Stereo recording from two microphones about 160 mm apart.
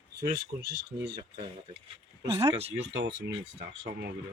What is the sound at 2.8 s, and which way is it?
Speech, 90° right.